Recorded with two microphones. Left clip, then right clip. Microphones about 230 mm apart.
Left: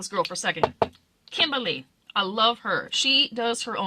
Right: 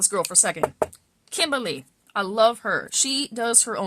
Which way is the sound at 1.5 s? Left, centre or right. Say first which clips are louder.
Right 1 dB; right.